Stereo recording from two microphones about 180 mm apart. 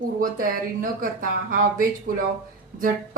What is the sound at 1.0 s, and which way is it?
A woman's voice, 50° right (ahead or behind).